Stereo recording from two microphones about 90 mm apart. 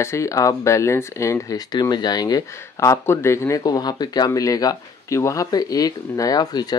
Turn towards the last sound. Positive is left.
turn(degrees=45)  # may be behind; listen again after turning